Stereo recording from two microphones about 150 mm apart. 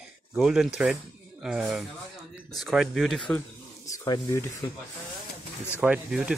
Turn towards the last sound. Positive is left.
turn(degrees=-5)  # may be behind; listen again after turning